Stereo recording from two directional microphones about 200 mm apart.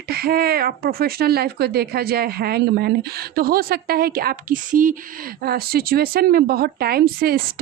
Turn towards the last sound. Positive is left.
turn(degrees=-50)  # may be behind; listen again after turning